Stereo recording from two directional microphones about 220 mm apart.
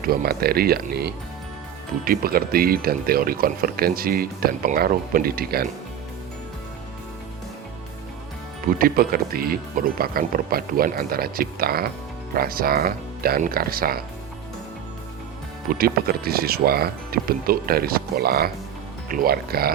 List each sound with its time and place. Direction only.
0.0 s speech: 40° right (ahead or behind)
8.8 s speech: 40° right (ahead or behind)
15.8 s speech: 45° right (ahead or behind)